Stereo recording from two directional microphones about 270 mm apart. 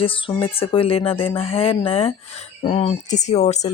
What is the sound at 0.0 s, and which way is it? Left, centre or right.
Speech, centre.